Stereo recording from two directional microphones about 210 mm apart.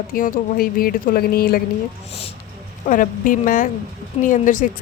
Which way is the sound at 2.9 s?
40° left (ahead or behind).